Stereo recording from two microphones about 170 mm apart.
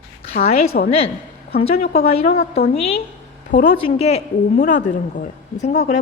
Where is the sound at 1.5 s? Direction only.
35° left (ahead or behind).